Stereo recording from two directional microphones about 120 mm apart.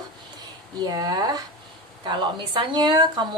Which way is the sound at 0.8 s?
35° right (ahead or behind).